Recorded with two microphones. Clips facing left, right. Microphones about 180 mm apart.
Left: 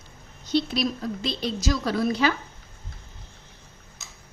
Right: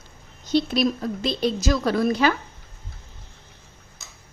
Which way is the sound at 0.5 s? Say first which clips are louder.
Right 3 dB; 50° right (ahead or behind).